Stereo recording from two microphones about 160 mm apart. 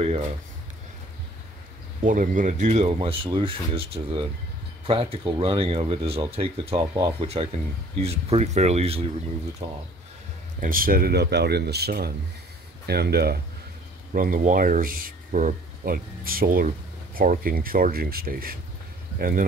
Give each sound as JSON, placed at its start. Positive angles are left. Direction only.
{"t": 0.0, "sound": "speech", "side_deg": -40}
{"t": 2.0, "sound": "speech", "side_deg": -55}
{"t": 10.6, "sound": "speech", "side_deg": -60}
{"t": 14.1, "sound": "speech", "side_deg": -60}